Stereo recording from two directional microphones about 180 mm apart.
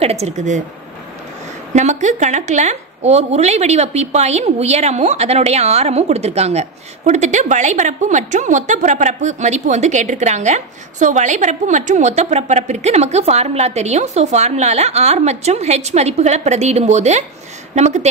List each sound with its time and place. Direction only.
0.0 s speech: 35° right (ahead or behind)
1.7 s speech: 40° right (ahead or behind)